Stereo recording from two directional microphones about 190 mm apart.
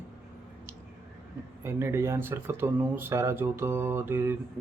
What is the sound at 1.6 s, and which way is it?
Speech, 15° right (ahead or behind).